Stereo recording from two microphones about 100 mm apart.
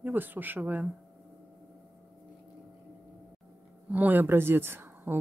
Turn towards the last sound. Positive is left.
turn(degrees=-20)  # may be behind; listen again after turning